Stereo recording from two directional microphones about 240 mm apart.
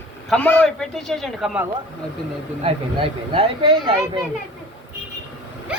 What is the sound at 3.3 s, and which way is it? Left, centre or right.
Speech, right.